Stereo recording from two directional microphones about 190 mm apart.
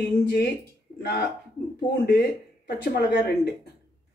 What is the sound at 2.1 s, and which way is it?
Speech, 60° left (ahead or behind).